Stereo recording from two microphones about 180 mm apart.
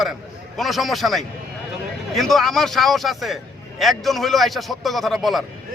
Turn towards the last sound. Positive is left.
turn(degrees=0)  # may be behind; listen again after turning